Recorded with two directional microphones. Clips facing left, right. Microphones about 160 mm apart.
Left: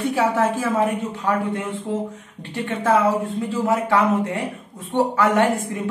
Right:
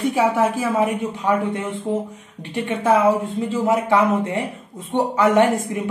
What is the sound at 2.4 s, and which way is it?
A woman's voice, 15° right (ahead or behind).